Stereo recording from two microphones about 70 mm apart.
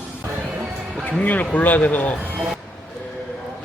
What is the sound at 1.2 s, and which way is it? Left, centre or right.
Speech, left.